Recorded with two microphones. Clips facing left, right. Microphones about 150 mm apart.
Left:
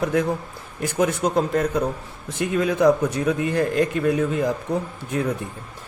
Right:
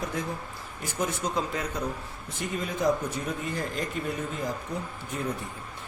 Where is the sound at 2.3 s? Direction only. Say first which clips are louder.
Left 10 dB; 85° left.